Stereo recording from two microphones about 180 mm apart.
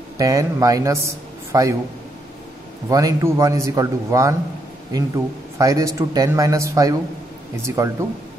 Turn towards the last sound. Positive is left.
turn(degrees=-15)  # may be behind; listen again after turning